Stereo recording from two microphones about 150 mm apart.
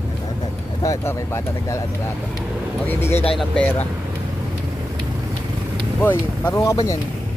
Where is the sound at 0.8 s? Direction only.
20° left (ahead or behind).